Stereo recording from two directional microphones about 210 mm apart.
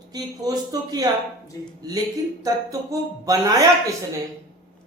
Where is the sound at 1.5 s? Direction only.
15° left (ahead or behind).